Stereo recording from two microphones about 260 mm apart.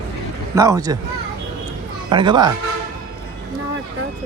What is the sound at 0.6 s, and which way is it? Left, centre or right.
Speech, centre.